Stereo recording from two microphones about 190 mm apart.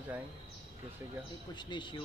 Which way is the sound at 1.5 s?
25° left (ahead or behind).